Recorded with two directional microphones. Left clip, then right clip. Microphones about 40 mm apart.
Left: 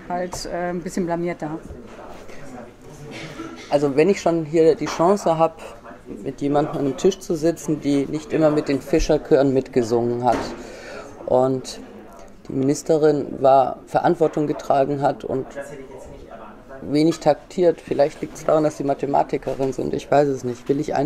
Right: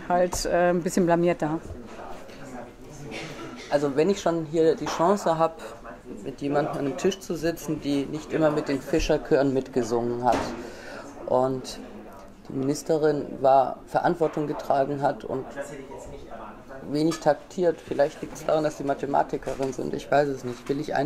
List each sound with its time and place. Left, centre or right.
0.1 s speech: right
1.0 s speech: right
3.7 s speech: left
4.2 s speech: centre
4.6 s speech: left
6.2 s speech: centre
7.0 s speech: left
16.9 s speech: left